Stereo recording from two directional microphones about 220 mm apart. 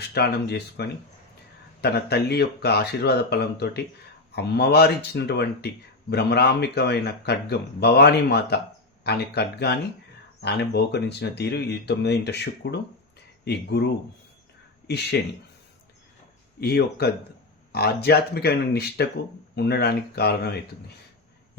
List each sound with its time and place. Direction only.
0.1 s speech: 45° left (ahead or behind)
16.6 s speech: 45° left (ahead or behind)